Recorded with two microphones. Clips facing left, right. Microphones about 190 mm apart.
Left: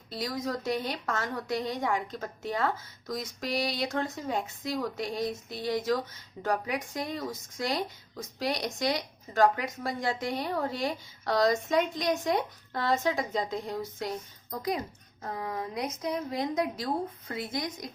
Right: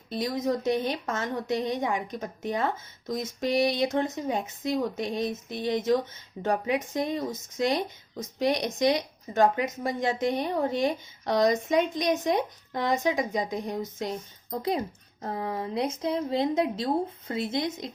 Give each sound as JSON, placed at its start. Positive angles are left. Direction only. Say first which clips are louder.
{"t": 0.1, "sound": "a woman's voice", "louder": "right 5 dB", "side_deg": -20}